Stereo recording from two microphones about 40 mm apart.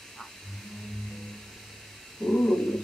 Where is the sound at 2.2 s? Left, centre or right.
Left.